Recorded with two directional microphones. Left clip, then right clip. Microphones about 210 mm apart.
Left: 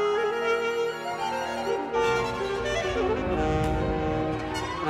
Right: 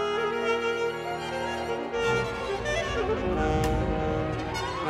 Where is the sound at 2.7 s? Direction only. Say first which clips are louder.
Even; 20° left (ahead or behind).